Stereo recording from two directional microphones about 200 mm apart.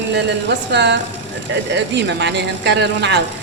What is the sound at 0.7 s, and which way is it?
Speech, 60° right (ahead or behind).